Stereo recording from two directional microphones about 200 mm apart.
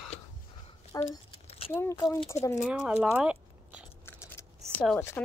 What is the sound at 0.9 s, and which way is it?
Speech, 15° left (ahead or behind).